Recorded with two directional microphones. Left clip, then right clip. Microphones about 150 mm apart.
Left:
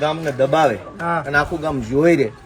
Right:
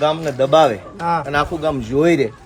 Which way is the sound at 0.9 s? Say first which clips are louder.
Right 2 dB; 50° right (ahead or behind).